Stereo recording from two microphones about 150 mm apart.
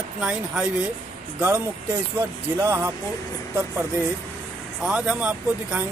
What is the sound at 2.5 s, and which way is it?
Speech, 20° right (ahead or behind).